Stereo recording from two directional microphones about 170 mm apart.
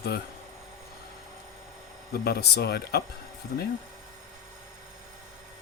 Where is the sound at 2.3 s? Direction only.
70° left (ahead or behind).